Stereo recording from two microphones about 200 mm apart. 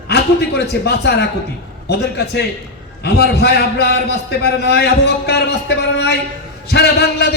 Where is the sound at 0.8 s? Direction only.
55° left (ahead or behind).